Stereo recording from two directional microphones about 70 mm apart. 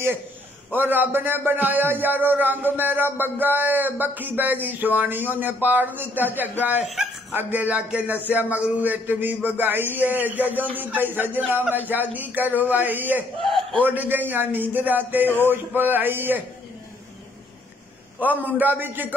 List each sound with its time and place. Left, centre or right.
0.7 s a man's voice: right
6.8 s speech: centre
7.3 s a man's voice: right
13.5 s a sound: centre
13.8 s a man's voice: right
18.2 s a man's voice: right